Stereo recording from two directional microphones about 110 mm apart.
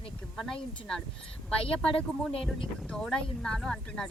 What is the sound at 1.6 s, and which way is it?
Speech, 55° left (ahead or behind).